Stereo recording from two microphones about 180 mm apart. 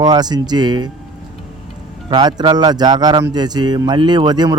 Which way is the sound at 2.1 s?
25° right (ahead or behind).